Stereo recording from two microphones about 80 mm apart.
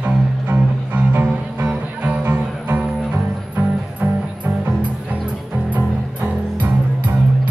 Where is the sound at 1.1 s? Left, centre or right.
Centre.